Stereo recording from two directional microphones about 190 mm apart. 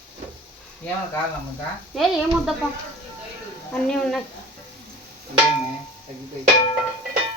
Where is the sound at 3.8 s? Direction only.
5° left (ahead or behind).